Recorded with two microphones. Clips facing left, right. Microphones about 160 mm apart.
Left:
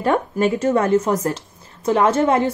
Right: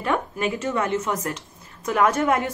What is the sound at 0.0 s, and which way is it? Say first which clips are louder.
A woman's voice: left 6 dB; 35° left (ahead or behind).